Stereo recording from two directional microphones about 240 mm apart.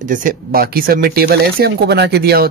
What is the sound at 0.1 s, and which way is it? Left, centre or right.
Speech, right.